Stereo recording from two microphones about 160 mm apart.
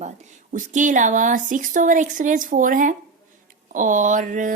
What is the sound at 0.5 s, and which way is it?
Speech, 50° right (ahead or behind).